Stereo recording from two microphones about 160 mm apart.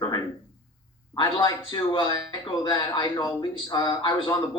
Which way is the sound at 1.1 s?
30° left (ahead or behind).